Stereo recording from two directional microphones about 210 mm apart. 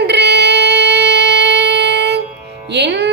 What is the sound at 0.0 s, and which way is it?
Music, 55° right (ahead or behind).